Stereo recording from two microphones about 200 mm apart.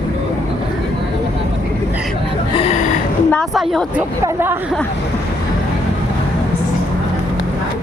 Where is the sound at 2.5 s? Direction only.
30° left (ahead or behind).